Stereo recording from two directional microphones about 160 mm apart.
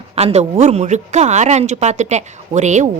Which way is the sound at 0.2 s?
40° right (ahead or behind).